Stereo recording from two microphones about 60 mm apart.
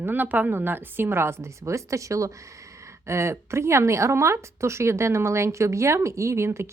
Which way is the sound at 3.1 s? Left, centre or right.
Right.